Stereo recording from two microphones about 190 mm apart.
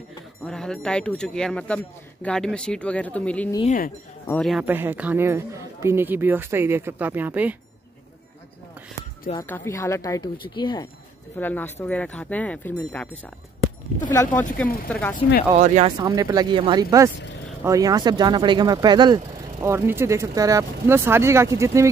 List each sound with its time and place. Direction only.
0.5 s speech: 5° left (ahead or behind)
3.6 s speech: 45° left (ahead or behind)
4.3 s speech: centre (ahead or behind)
4.6 s speech: 10° right (ahead or behind)
9.4 s speech: 15° left (ahead or behind)
11.3 s speech: 10° left (ahead or behind)
15.5 s speech: 35° right (ahead or behind)
16.0 s speech: 15° right (ahead or behind)